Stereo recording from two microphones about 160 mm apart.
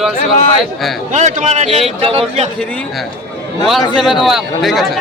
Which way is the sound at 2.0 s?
35° right (ahead or behind).